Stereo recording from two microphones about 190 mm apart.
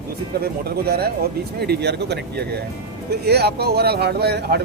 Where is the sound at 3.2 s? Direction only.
60° right (ahead or behind).